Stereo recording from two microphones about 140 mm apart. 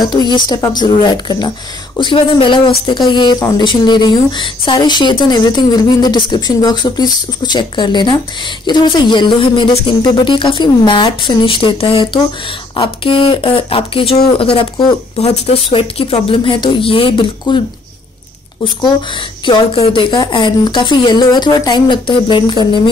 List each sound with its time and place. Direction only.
0.0 s speech: 30° left (ahead or behind)
18.6 s speech: 35° left (ahead or behind)